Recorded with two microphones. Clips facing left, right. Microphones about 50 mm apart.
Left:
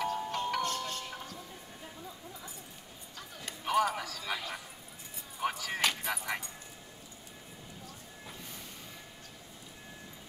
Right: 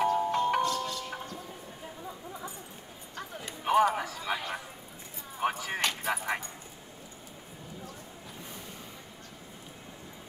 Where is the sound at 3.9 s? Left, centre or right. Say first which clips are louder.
Right 5 dB; right.